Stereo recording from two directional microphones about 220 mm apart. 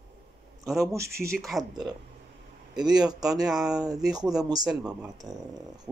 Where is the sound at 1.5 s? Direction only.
Centre (ahead or behind).